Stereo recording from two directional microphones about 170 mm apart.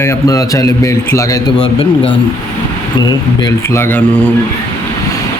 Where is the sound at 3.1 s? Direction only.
20° left (ahead or behind).